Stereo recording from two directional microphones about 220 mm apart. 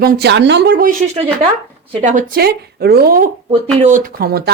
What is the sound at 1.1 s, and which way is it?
Speech, 25° right (ahead or behind).